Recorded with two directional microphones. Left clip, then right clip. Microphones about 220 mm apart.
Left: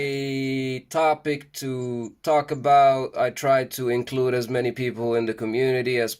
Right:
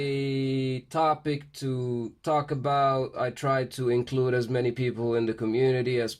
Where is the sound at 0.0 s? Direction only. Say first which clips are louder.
Left 2 dB; 5° left (ahead or behind).